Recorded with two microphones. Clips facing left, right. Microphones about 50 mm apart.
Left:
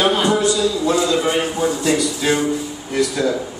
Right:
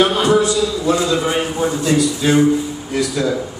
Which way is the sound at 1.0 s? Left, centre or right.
Centre.